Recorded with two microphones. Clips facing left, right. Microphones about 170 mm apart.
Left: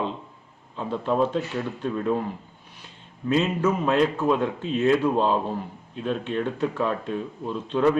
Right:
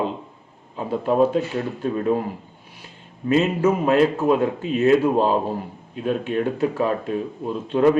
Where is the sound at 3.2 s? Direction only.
10° right (ahead or behind).